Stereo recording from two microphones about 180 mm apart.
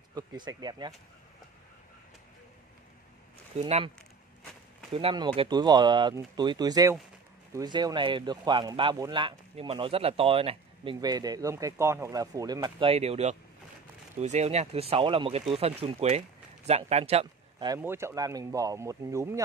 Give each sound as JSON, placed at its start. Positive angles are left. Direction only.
{"t": 0.1, "sound": "speech", "side_deg": -20}
{"t": 3.5, "sound": "speech", "side_deg": -35}
{"t": 4.9, "sound": "speech", "side_deg": -25}
{"t": 17.7, "sound": "speech", "side_deg": -15}